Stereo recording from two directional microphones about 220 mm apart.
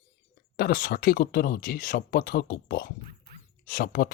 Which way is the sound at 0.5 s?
40° left (ahead or behind).